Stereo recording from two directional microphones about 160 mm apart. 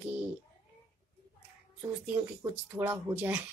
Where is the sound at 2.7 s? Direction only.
15° right (ahead or behind).